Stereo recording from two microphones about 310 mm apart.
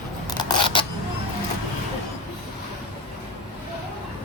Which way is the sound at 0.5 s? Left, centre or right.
Centre.